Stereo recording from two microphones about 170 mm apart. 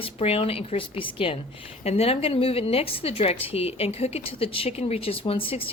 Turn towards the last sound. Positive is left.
turn(degrees=35)  # may be behind; listen again after turning